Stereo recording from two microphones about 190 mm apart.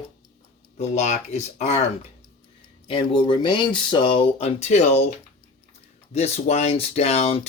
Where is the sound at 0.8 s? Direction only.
40° left (ahead or behind).